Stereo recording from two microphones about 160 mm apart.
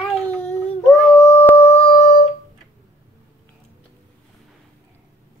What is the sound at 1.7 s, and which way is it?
Humming, 35° left (ahead or behind).